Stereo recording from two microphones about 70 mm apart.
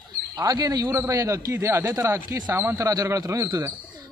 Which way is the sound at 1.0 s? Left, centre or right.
Right.